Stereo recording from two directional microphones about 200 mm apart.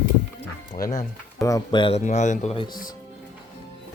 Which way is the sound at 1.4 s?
15° left (ahead or behind).